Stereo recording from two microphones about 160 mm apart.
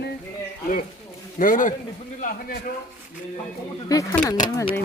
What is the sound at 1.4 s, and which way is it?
A child's voice, 55° left (ahead or behind).